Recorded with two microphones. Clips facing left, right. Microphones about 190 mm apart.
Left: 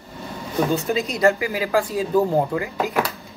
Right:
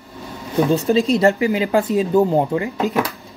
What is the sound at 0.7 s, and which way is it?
Speech, 30° right (ahead or behind).